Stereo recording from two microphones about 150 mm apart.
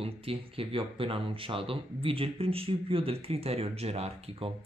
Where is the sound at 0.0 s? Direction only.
40° right (ahead or behind).